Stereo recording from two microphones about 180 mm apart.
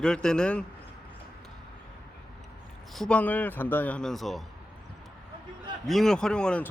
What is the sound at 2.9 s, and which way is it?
A man's voice, 5° left (ahead or behind).